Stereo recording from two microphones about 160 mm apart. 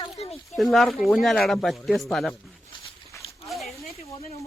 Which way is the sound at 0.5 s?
Centre (ahead or behind).